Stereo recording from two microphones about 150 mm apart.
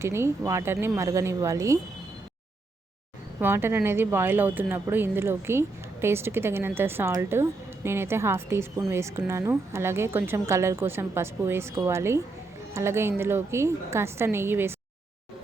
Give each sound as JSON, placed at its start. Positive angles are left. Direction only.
{"t": 0.0, "sound": "speech", "side_deg": -15}
{"t": 3.4, "sound": "speech", "side_deg": -15}